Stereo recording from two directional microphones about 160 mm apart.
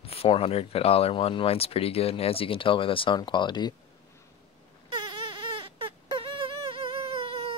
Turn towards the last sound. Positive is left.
turn(degrees=-35)  # may be behind; listen again after turning